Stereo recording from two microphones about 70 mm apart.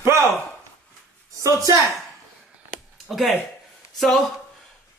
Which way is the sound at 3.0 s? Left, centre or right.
Centre.